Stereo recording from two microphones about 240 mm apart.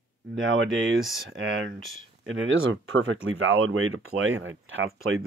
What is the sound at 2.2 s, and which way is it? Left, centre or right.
Speech, right.